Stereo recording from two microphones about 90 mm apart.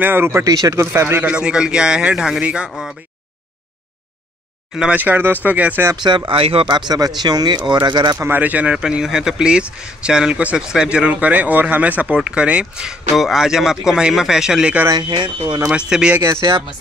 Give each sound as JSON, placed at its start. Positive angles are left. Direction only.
{"t": 0.0, "sound": "speech", "side_deg": -25}
{"t": 1.2, "sound": "speech", "side_deg": -10}
{"t": 4.7, "sound": "speech", "side_deg": -15}
{"t": 6.0, "sound": "speech", "side_deg": -65}
{"t": 6.7, "sound": "speech", "side_deg": -45}
{"t": 8.2, "sound": "speech", "side_deg": -20}
{"t": 15.0, "sound": "speech", "side_deg": -60}
{"t": 15.9, "sound": "speech", "side_deg": -10}
{"t": 16.3, "sound": "speech", "side_deg": -30}